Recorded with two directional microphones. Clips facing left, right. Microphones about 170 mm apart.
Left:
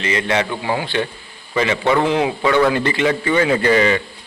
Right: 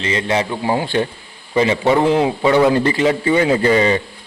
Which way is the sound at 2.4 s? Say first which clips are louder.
Right 2 dB; 20° right (ahead or behind).